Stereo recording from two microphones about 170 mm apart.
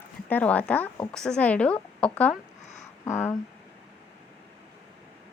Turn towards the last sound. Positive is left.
turn(degrees=15)  # may be behind; listen again after turning